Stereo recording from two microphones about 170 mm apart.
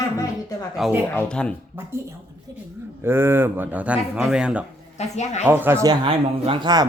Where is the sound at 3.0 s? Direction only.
15° right (ahead or behind).